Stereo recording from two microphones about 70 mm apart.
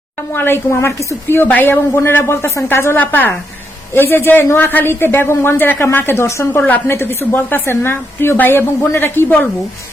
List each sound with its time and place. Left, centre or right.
0.3 s a woman's voice: left
6.7 s a woman's voice: left
6.9 s a woman's voice: left